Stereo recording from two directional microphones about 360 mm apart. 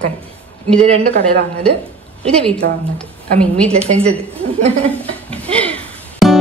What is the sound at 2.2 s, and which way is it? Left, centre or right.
A woman's voice, centre.